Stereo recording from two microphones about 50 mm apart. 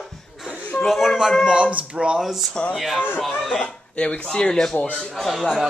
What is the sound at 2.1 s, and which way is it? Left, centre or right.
Speech, centre.